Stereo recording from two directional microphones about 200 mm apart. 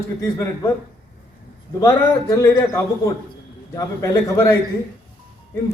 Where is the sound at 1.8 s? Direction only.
15° left (ahead or behind).